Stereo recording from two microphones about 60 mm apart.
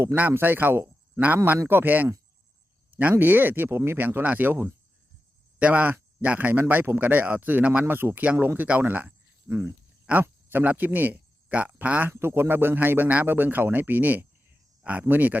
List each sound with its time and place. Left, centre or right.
0.2 s a man's voice: right
7.9 s speech: right
9.5 s speech: right
10.2 s a sound: right
10.7 s speech: right
12.1 s speech: right